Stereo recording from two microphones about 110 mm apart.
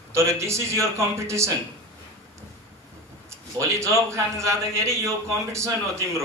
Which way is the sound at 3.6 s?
25° right (ahead or behind).